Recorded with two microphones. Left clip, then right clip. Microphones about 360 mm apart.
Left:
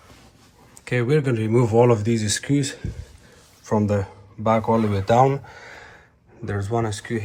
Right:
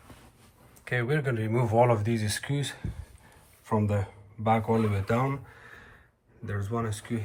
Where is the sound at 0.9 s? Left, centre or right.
Centre.